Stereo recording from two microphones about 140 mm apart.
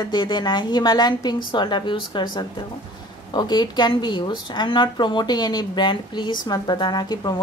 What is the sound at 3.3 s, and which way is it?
A woman's voice, 30° left (ahead or behind).